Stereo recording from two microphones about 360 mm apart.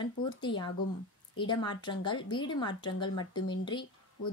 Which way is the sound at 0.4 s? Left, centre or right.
Centre.